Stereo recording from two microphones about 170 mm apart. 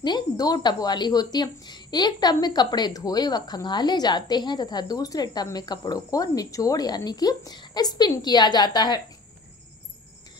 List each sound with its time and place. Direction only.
0.0 s a woman's voice: 25° left (ahead or behind)